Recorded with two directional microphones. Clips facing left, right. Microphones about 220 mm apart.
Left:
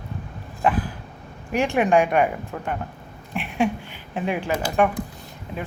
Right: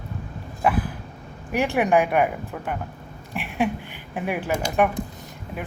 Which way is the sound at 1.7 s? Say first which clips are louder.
Left 1 dB; 15° right (ahead or behind).